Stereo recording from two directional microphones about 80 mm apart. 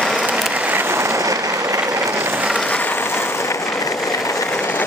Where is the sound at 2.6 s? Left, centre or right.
Centre; by 4.4 s left.